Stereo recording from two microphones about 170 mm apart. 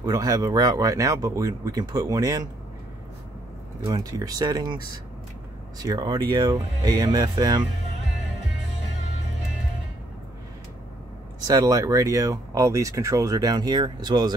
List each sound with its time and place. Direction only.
0.0 s speech: 20° right (ahead or behind)
3.9 s speech: 20° right (ahead or behind)
5.8 s speech: 25° right (ahead or behind)
11.4 s speech: 20° right (ahead or behind)